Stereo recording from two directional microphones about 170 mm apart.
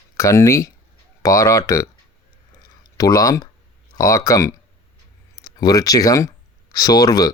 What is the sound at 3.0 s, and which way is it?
Speech, 20° left (ahead or behind).